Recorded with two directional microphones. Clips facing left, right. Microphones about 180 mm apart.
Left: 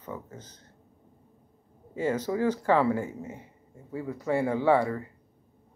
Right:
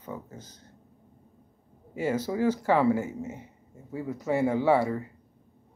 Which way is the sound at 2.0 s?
10° right (ahead or behind).